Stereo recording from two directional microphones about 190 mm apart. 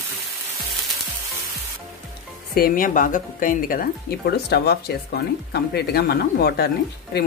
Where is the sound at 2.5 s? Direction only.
50° left (ahead or behind).